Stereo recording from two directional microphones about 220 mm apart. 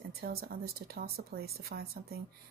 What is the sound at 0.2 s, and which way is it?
Speech, 45° right (ahead or behind).